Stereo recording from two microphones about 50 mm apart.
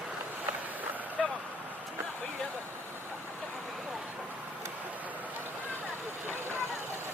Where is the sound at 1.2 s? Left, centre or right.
Centre.